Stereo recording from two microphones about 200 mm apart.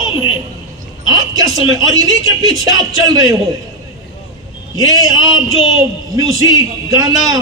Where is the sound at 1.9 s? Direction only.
20° right (ahead or behind).